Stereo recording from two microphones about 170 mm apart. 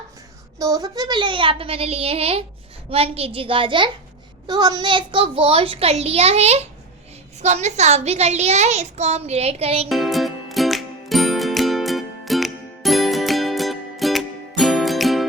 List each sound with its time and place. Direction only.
0.6 s a woman's voice: 20° right (ahead or behind)
9.9 s music: centre (ahead or behind)